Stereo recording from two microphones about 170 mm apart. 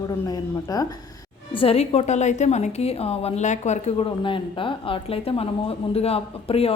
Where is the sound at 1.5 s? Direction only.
35° left (ahead or behind).